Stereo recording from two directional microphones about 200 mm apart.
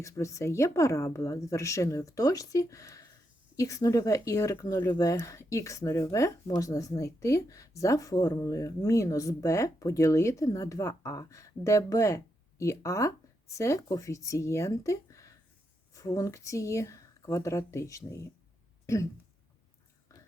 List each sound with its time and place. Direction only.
0.0 s speech: 15° left (ahead or behind)